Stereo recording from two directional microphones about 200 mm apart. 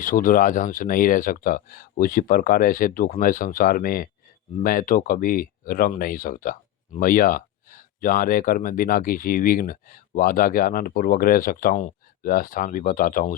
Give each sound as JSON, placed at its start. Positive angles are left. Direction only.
{"t": 0.0, "sound": "speech", "side_deg": 40}